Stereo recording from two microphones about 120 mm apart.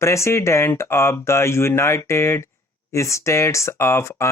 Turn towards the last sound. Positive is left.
turn(degrees=25)  # may be behind; listen again after turning